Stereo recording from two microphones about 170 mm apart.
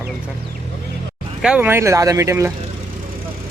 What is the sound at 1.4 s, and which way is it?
Speech, 5° right (ahead or behind).